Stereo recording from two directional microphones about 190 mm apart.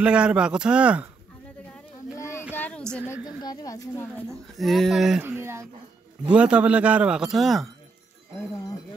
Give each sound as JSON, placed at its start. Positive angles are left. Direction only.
{"t": 0.0, "sound": "a man's voice", "side_deg": -5}
{"t": 2.1, "sound": "a sound", "side_deg": 15}
{"t": 3.3, "sound": "speech", "side_deg": 20}
{"t": 4.6, "sound": "a man's voice", "side_deg": 0}
{"t": 5.2, "sound": "a man's voice", "side_deg": -10}